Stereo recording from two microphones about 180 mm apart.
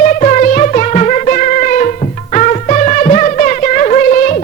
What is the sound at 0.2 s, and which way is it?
Music, 45° left (ahead or behind).